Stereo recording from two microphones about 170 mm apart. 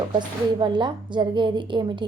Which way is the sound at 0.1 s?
25° right (ahead or behind).